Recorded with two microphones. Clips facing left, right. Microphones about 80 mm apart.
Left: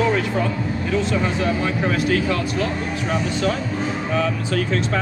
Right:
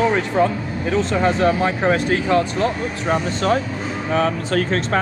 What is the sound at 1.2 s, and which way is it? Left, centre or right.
Speech, right.